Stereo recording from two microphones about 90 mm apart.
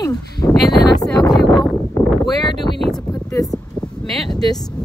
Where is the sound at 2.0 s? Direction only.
25° left (ahead or behind).